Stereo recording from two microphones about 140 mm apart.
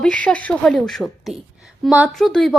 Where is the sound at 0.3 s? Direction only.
5° left (ahead or behind).